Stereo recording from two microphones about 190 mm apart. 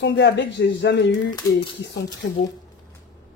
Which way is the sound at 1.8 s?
65° left (ahead or behind).